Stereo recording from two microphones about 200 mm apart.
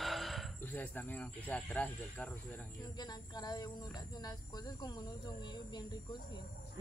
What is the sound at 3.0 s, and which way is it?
Speech, 20° left (ahead or behind).